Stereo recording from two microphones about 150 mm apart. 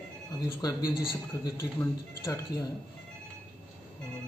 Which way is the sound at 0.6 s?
25° left (ahead or behind).